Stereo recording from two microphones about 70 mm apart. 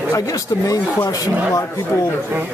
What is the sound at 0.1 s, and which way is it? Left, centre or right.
Speech, left.